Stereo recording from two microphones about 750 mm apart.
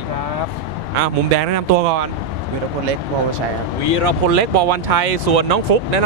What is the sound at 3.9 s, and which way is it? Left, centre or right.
Speech, right.